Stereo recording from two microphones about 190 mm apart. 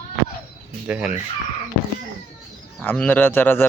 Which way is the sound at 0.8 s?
5° right (ahead or behind).